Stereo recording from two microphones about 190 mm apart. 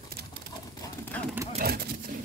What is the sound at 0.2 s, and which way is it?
Pigeon, 55° right (ahead or behind).